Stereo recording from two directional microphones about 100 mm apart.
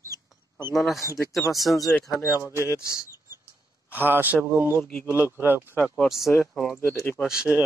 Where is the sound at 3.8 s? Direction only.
20° right (ahead or behind).